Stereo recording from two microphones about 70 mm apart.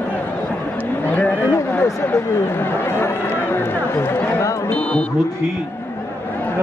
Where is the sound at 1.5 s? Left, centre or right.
Left.